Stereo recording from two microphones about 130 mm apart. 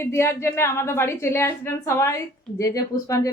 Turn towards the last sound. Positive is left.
turn(degrees=25)  # may be behind; listen again after turning